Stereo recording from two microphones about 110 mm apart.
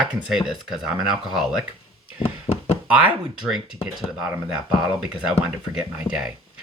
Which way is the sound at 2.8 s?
10° right (ahead or behind).